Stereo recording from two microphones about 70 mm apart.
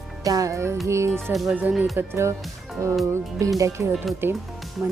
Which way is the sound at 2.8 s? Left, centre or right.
Right.